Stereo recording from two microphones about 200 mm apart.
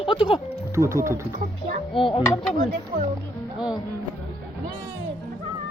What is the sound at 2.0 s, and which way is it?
Speech, 25° left (ahead or behind).